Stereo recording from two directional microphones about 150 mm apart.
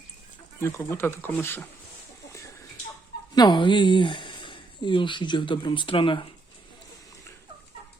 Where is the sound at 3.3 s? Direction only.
30° left (ahead or behind).